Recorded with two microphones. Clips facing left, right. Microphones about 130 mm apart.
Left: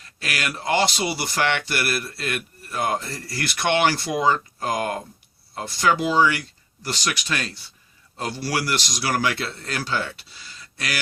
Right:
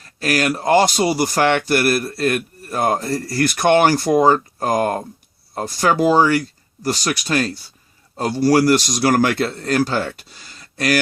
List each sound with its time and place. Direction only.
0.0 s speech: 40° right (ahead or behind)